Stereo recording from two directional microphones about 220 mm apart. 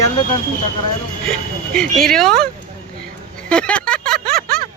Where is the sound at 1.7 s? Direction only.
5° left (ahead or behind).